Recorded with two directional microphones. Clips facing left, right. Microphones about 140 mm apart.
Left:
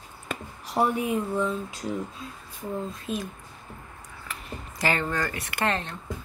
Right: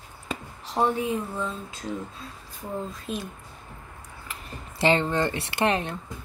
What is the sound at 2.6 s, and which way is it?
Speech, centre (ahead or behind).